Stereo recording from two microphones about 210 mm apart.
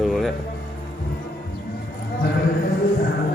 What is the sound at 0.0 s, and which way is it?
Music, centre (ahead or behind).